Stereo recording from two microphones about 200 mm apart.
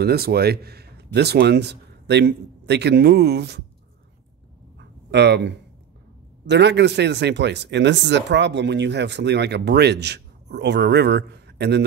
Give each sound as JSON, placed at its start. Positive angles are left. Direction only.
{"t": 0.0, "sound": "speech", "side_deg": -50}
{"t": 4.7, "sound": "dog", "side_deg": -60}
{"t": 6.4, "sound": "speech", "side_deg": -60}